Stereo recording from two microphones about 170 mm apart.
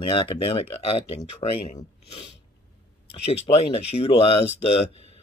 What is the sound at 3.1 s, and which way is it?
Speech, 35° left (ahead or behind).